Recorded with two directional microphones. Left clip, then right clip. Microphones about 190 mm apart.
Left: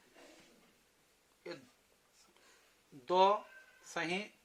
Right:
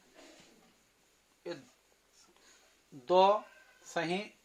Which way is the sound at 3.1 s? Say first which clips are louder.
Right 4 dB; 40° right (ahead or behind).